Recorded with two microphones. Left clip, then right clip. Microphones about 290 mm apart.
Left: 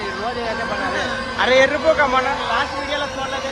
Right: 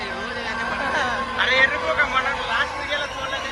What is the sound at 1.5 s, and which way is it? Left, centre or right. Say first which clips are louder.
Speech: left 5 dB; centre.